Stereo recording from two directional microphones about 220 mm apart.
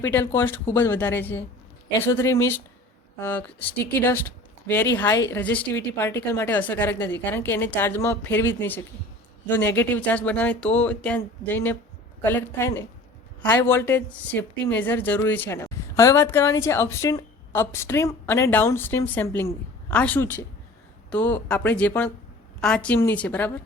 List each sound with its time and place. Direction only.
0.0 s speech: 10° left (ahead or behind)
5.3 s speech: 5° left (ahead or behind)